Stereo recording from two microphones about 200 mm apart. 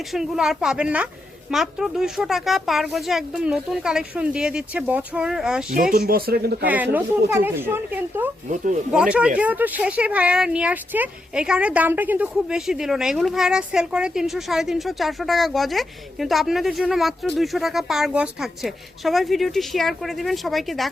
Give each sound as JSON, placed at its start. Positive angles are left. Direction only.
{"t": 0.1, "sound": "speech", "side_deg": 0}
{"t": 5.9, "sound": "speech", "side_deg": -50}
{"t": 7.3, "sound": "speech", "side_deg": -10}
{"t": 8.4, "sound": "speech", "side_deg": -40}
{"t": 8.9, "sound": "speech", "side_deg": -5}